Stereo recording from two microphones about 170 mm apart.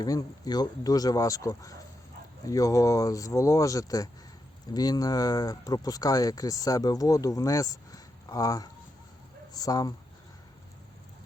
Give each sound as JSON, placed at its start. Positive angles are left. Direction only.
{"t": 0.0, "sound": "speech", "side_deg": 20}